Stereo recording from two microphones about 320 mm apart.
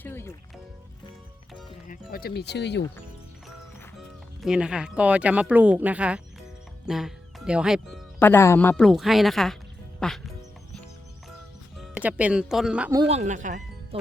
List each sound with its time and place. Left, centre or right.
0.0 s music: centre
1.9 s speech: left
4.4 s speech: centre
11.8 s speech: centre